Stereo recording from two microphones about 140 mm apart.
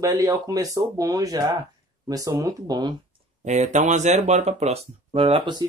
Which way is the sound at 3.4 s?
60° right (ahead or behind).